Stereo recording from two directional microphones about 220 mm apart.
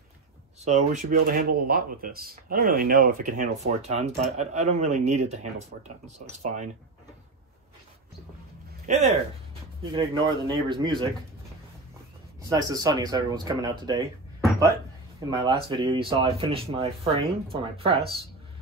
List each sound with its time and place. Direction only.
0.7 s speech: 30° right (ahead or behind)
8.9 s speech: 35° right (ahead or behind)
9.9 s speech: 20° right (ahead or behind)
12.4 s speech: 15° right (ahead or behind)
15.1 s speech: 20° right (ahead or behind)